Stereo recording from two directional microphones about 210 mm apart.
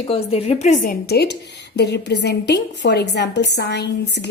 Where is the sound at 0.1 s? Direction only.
30° left (ahead or behind).